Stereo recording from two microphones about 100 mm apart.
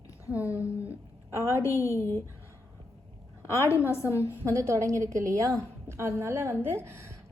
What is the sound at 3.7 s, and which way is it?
Speech, 30° left (ahead or behind).